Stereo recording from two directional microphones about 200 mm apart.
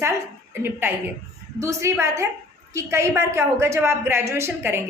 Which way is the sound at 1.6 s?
15° right (ahead or behind).